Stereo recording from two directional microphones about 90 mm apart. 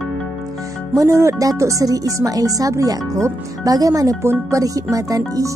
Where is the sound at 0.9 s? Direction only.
35° right (ahead or behind).